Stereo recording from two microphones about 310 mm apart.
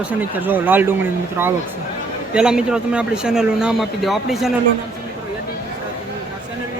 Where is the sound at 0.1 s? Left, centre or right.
Centre.